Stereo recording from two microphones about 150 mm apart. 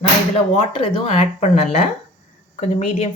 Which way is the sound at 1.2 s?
50° left (ahead or behind).